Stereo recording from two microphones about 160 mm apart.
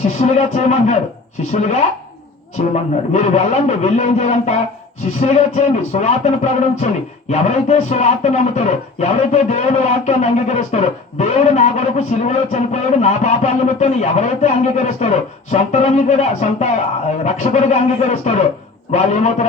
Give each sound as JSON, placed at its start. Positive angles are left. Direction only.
{"t": 0.0, "sound": "speech", "side_deg": 45}